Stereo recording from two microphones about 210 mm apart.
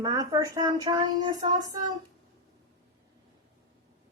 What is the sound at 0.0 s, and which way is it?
Speech, 20° right (ahead or behind).